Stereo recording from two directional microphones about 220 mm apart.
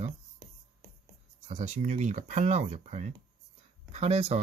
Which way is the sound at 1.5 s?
30° right (ahead or behind).